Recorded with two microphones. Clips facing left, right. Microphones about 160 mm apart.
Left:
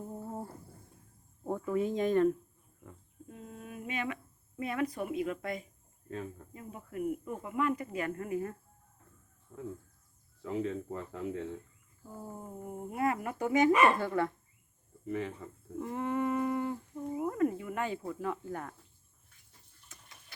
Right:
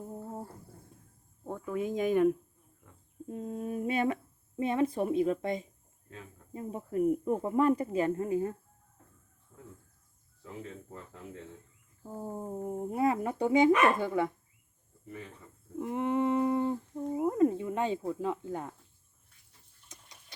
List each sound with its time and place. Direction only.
0.1 s a sound: centre (ahead or behind)
1.5 s cricket: 10° left (ahead or behind)
1.7 s speech: 5° right (ahead or behind)
3.2 s speech: 35° right (ahead or behind)
9.5 s bird: 85° left
10.4 s speech: 85° left
12.0 s speech: 30° right (ahead or behind)
13.7 s speech: 10° left (ahead or behind)
14.0 s speech: 15° right (ahead or behind)
15.8 s humming: 20° right (ahead or behind)
17.2 s speech: 20° right (ahead or behind)
19.9 s tick-tock: 20° right (ahead or behind)